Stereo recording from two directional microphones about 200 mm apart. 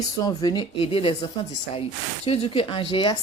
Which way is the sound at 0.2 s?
20° left (ahead or behind).